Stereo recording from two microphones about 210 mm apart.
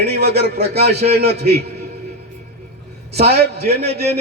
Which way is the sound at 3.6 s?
30° right (ahead or behind).